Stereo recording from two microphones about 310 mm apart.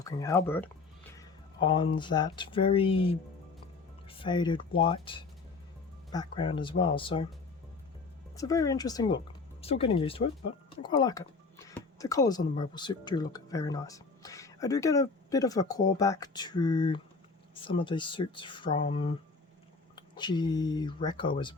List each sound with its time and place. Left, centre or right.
0.0 s speech: centre
8.4 s speech: centre